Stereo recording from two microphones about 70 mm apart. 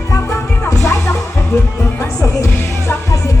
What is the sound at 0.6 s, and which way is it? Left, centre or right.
Music, left.